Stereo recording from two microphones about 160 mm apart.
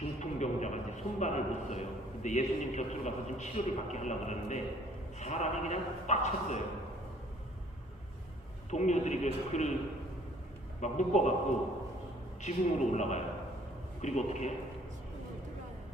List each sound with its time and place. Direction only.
0.2 s a sound: 45° left (ahead or behind)
2.2 s a man's voice: 45° left (ahead or behind)
8.7 s a man's voice: 45° left (ahead or behind)
10.8 s a man's voice: 45° left (ahead or behind)
12.4 s a man's voice: 45° left (ahead or behind)